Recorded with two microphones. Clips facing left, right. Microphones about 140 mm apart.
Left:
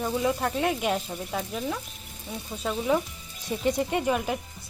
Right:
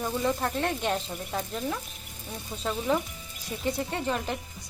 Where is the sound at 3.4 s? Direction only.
20° left (ahead or behind).